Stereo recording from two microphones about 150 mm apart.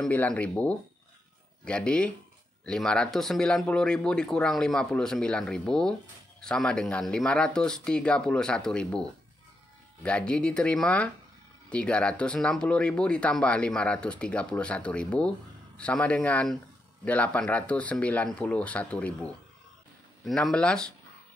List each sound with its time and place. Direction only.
0.0 s speech: 10° left (ahead or behind)
10.0 s speech: 5° left (ahead or behind)